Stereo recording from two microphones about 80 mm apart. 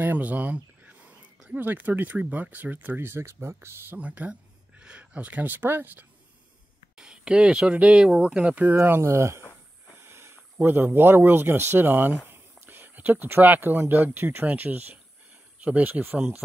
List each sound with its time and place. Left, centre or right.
0.0 s speech: right
4.0 s speech: centre
7.0 s speech: centre
8.8 s speech: right